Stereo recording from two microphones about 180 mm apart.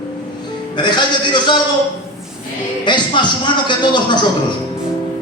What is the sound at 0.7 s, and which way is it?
Speech, 25° left (ahead or behind).